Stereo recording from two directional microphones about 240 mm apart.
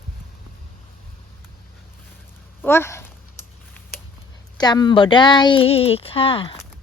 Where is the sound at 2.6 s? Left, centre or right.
Centre.